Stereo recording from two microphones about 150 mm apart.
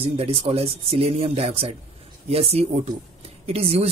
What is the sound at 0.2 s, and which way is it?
Speech, 40° right (ahead or behind).